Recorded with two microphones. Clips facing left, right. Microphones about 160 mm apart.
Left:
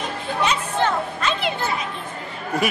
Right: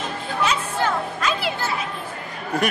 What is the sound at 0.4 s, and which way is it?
Children playing, 5° right (ahead or behind).